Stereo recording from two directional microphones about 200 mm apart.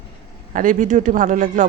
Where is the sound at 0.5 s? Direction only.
40° right (ahead or behind).